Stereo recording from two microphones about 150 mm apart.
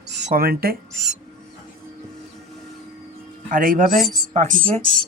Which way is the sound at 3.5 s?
65° right (ahead or behind).